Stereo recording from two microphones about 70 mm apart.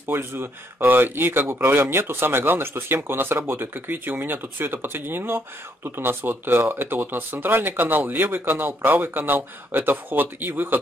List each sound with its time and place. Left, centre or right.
0.1 s speech: right